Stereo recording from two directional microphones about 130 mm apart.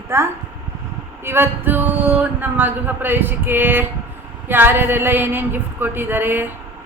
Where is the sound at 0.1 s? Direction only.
20° right (ahead or behind).